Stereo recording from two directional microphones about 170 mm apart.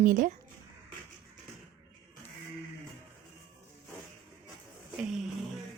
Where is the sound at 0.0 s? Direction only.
50° right (ahead or behind).